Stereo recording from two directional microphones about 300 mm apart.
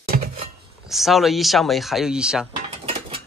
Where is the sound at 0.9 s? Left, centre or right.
Centre.